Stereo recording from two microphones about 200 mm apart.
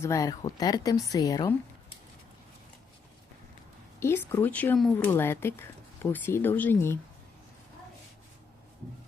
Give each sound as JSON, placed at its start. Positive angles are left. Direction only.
{"t": 0.0, "sound": "speech", "side_deg": 15}
{"t": 4.0, "sound": "speech", "side_deg": 10}